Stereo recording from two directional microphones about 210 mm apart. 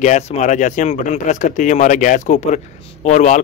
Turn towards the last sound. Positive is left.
turn(degrees=35)  # may be behind; listen again after turning